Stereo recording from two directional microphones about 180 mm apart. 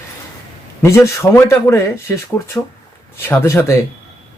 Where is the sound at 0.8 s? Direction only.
15° left (ahead or behind).